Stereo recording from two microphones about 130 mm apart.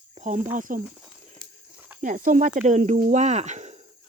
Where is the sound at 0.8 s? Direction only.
5° right (ahead or behind).